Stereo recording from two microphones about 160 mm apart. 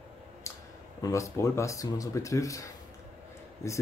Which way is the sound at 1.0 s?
20° left (ahead or behind).